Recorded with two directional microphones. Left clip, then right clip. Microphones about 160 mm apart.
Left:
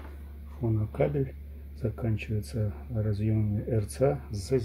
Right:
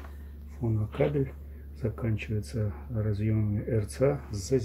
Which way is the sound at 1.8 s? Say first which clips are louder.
Even; 10° left (ahead or behind).